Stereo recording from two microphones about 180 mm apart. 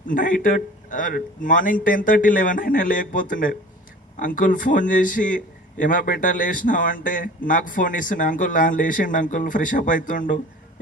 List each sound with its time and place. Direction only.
0.1 s a man's voice: 50° left (ahead or behind)